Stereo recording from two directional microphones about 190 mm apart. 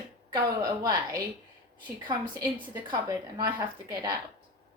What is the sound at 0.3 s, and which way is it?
A woman's voice, 20° right (ahead or behind).